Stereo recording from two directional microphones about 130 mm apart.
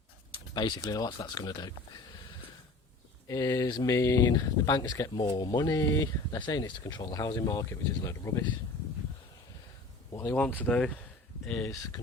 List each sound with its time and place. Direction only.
0.5 s speech: 35° left (ahead or behind)
3.2 s speech: 25° left (ahead or behind)
10.1 s a sound: 20° left (ahead or behind)
10.4 s speech: 10° left (ahead or behind)
11.6 s speech: 25° left (ahead or behind)